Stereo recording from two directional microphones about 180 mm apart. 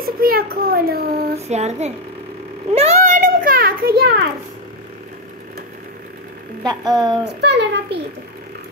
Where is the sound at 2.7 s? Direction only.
35° right (ahead or behind); by 4.2 s 60° right (ahead or behind).